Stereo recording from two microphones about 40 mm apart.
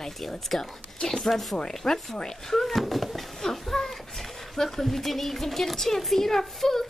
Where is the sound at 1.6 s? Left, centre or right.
Centre.